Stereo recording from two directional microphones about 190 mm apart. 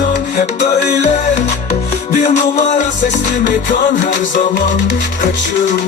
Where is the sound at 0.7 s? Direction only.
40° left (ahead or behind).